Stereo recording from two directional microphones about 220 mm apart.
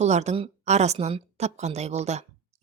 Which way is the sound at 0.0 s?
30° right (ahead or behind).